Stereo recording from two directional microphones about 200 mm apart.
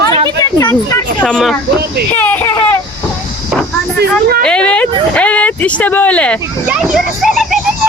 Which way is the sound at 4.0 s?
50° right (ahead or behind).